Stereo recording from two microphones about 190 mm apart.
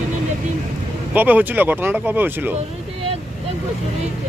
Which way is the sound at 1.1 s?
10° right (ahead or behind).